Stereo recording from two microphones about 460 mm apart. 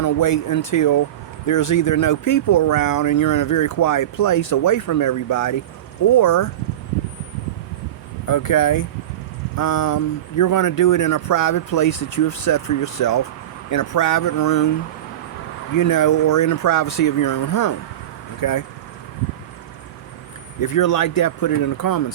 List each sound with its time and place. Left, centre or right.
0.0 s speech: left
8.3 s speech: left
15.7 s speech: left
20.6 s speech: left